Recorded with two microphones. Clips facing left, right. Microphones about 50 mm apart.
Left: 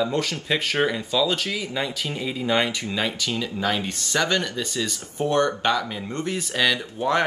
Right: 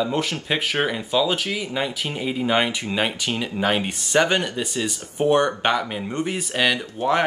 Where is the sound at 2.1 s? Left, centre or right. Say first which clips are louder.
Right 2 dB; right.